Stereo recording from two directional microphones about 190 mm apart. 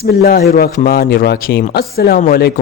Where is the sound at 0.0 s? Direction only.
55° left (ahead or behind).